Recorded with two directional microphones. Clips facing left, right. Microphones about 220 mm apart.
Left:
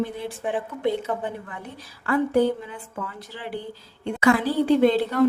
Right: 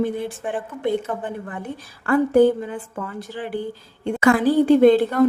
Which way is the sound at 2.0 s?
50° right (ahead or behind).